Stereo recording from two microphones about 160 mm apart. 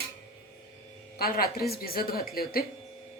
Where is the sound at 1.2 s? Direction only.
70° left (ahead or behind).